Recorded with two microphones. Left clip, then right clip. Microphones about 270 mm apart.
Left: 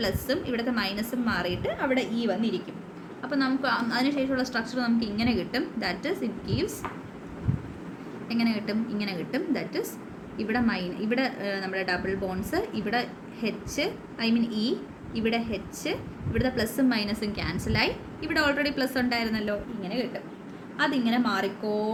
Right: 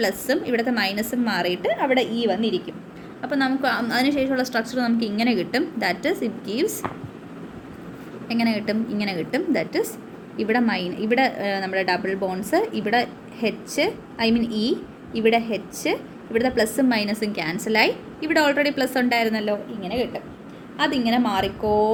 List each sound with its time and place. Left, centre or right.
0.0 s a woman's voice: centre
3.2 s a woman's voice: centre
8.3 s a woman's voice: centre
19.8 s a woman's voice: centre
20.7 s a woman's voice: centre